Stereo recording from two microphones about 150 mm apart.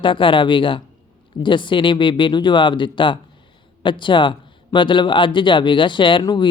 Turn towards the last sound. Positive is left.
turn(degrees=30)  # may be behind; listen again after turning